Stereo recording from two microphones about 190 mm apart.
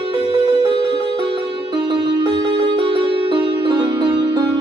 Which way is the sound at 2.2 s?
20° right (ahead or behind).